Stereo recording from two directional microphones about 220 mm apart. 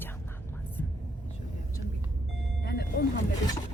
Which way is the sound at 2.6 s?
45° left (ahead or behind).